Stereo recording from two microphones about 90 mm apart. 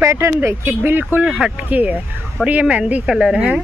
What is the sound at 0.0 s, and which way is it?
Speech, 30° right (ahead or behind).